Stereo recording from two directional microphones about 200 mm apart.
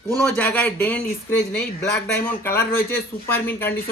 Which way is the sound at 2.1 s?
10° left (ahead or behind).